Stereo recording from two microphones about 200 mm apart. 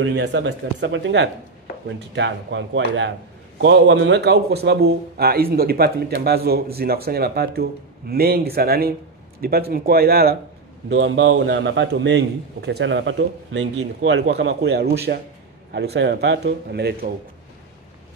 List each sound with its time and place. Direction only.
0.0 s a man's voice: 60° right (ahead or behind)
10.9 s a man's voice: 65° right (ahead or behind)